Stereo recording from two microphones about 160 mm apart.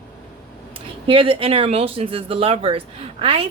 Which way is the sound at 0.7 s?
35° right (ahead or behind).